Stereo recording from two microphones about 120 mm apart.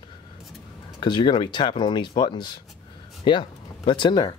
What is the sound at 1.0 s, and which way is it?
Speech, 40° left (ahead or behind).